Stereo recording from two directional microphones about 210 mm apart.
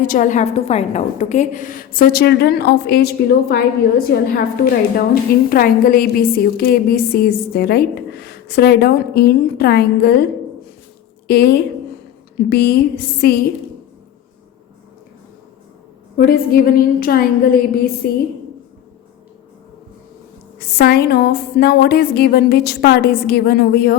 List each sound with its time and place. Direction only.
0.0 s a woman's voice: 40° left (ahead or behind)
11.3 s a woman's voice: 50° left (ahead or behind)
16.1 s a woman's voice: 45° left (ahead or behind)
20.6 s a woman's voice: 50° left (ahead or behind)